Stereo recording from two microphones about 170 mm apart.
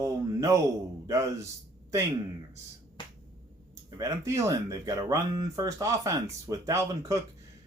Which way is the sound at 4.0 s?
15° right (ahead or behind).